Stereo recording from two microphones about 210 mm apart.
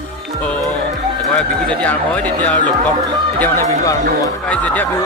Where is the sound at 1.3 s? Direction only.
5° left (ahead or behind).